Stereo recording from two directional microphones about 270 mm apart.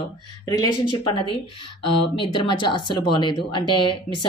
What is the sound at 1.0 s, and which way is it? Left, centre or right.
A woman's voice, centre.